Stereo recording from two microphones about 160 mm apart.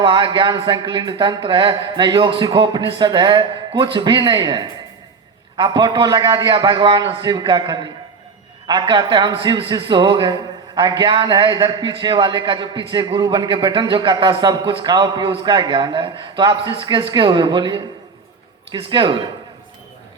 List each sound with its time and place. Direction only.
0.0 s a man's voice: 30° right (ahead or behind)